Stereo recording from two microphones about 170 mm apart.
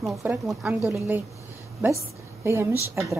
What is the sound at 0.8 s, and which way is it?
Speech, 15° right (ahead or behind).